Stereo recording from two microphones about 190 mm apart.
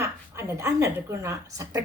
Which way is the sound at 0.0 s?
15° right (ahead or behind).